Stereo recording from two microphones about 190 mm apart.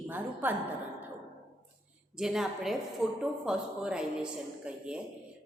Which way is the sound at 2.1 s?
5° right (ahead or behind).